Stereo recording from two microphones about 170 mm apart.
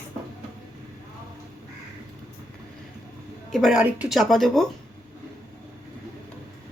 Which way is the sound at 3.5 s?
Centre (ahead or behind).